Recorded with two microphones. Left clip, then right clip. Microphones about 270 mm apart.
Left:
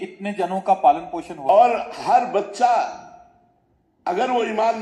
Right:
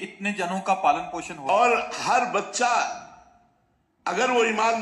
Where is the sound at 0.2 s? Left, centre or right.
Right.